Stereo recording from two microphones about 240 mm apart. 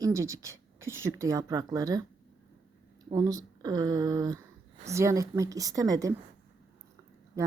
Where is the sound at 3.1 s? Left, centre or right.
Centre.